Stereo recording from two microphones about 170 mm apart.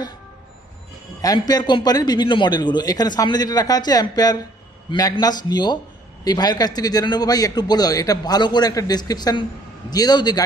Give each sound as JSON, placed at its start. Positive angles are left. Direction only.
{"t": 1.2, "sound": "a man's voice", "side_deg": 20}